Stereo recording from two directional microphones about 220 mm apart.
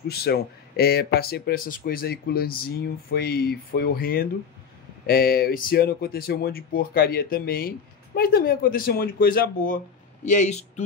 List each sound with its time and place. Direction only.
0.1 s a man's voice: 45° left (ahead or behind)